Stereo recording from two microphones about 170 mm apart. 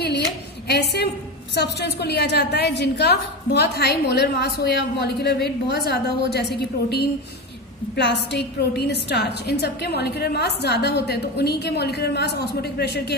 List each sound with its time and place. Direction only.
0.7 s a woman's voice: 75° left (ahead or behind)
7.9 s a woman's voice: 85° left